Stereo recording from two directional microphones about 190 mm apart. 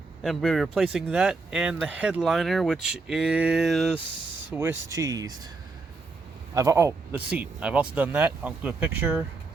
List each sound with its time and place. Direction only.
0.2 s speech: centre (ahead or behind)
4.5 s speech: 10° right (ahead or behind)
6.5 s speech: 15° right (ahead or behind)